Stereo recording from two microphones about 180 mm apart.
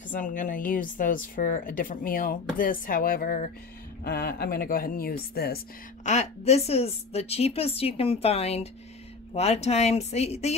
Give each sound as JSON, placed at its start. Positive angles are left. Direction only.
{"t": 0.1, "sound": "a woman's voice", "side_deg": 45}
{"t": 6.0, "sound": "a woman's voice", "side_deg": 40}